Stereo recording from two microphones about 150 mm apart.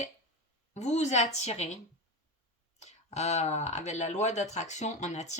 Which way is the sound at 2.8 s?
50° left (ahead or behind).